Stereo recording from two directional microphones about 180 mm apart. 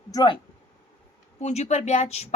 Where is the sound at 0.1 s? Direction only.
20° left (ahead or behind).